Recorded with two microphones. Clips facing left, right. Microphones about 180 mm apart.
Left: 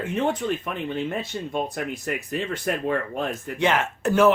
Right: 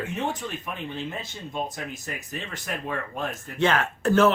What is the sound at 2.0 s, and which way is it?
Speech, 60° left (ahead or behind).